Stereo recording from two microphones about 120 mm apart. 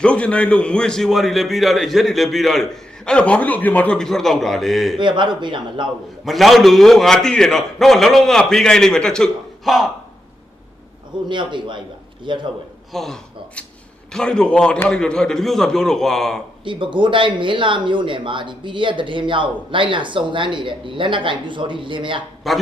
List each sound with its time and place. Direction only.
0.0 s a man's voice: 10° left (ahead or behind)
4.9 s speech: 40° right (ahead or behind)
6.2 s a man's voice: centre (ahead or behind)
11.3 s speech: 40° right (ahead or behind)
12.9 s a man's voice: centre (ahead or behind)
16.6 s speech: 45° right (ahead or behind)
22.5 s a man's voice: centre (ahead or behind)